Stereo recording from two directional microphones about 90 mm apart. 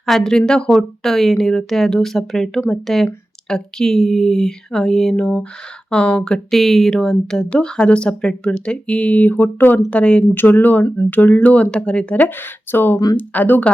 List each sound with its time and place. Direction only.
0.0 s speech: 5° left (ahead or behind); by 9.8 s 20° left (ahead or behind)
9.9 s speech: 10° left (ahead or behind)
10.3 s speech: 20° left (ahead or behind)